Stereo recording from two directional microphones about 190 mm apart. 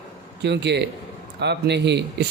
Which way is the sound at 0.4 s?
65° right (ahead or behind).